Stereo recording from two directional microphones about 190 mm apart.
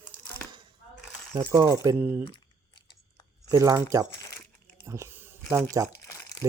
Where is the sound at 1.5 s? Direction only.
15° right (ahead or behind).